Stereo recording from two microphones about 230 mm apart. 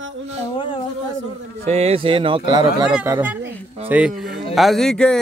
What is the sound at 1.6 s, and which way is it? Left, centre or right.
A man's voice, right.